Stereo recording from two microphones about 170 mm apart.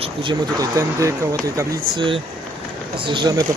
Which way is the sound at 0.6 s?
20° right (ahead or behind).